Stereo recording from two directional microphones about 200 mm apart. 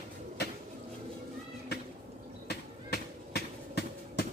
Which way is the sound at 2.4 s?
55° left (ahead or behind).